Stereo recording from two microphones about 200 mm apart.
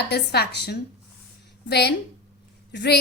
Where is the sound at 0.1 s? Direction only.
55° left (ahead or behind).